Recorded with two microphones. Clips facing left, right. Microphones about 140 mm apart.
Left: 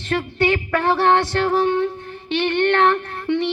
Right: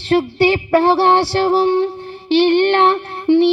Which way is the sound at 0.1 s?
30° right (ahead or behind).